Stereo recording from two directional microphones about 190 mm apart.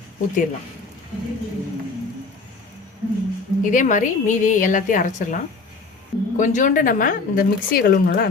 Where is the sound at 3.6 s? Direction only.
40° left (ahead or behind).